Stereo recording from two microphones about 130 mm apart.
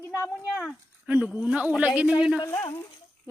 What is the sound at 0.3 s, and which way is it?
A woman's voice, 10° right (ahead or behind).